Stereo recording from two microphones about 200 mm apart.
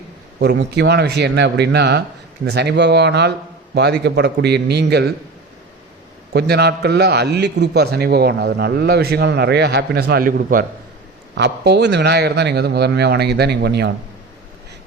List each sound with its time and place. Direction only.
0.3 s a man's voice: 55° right (ahead or behind)
6.3 s a man's voice: 55° right (ahead or behind)
11.3 s a man's voice: 60° right (ahead or behind)